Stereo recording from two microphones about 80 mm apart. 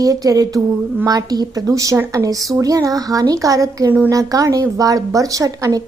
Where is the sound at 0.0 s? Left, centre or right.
Right.